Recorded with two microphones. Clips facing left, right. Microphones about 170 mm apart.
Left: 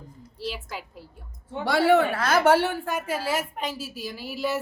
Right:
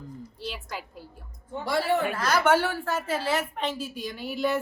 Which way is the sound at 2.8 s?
10° left (ahead or behind).